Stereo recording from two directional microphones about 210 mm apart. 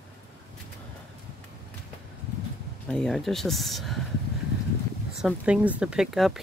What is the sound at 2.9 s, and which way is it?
Speech, centre (ahead or behind).